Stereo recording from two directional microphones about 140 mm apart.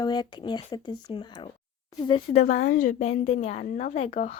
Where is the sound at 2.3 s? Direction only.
55° left (ahead or behind).